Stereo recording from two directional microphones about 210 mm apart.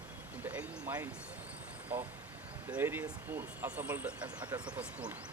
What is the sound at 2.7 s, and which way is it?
Speech, 10° right (ahead or behind).